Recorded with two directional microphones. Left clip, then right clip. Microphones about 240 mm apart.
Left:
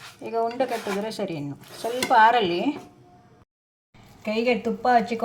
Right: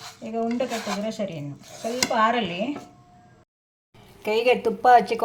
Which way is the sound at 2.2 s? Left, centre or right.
Left.